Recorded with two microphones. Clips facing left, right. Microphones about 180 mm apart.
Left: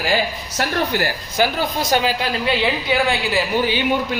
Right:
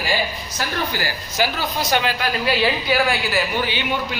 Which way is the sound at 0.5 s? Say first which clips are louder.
Left 5 dB; 60° left (ahead or behind).